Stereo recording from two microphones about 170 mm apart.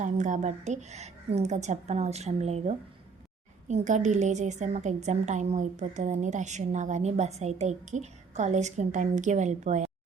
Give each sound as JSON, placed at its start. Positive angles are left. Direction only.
{"t": 0.0, "sound": "a woman's voice", "side_deg": -45}